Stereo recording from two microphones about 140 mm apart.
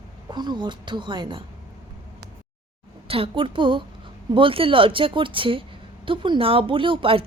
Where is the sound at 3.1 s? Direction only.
40° right (ahead or behind).